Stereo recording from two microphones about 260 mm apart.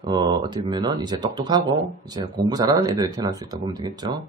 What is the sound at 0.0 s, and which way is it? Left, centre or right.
A man's voice, centre.